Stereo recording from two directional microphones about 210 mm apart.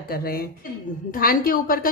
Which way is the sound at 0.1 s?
45° left (ahead or behind).